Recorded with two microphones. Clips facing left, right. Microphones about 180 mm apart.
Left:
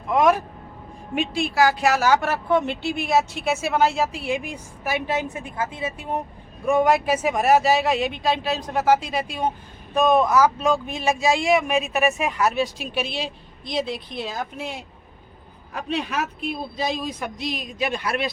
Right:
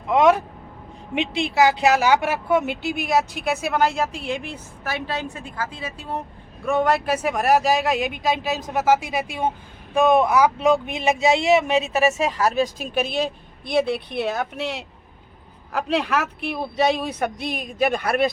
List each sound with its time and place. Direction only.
0.1 s vehicle: 25° right (ahead or behind)
1.1 s a woman's voice: 20° right (ahead or behind); by 14.8 s 75° right (ahead or behind)
15.7 s speech: 90° right; by 18.3 s 50° right (ahead or behind)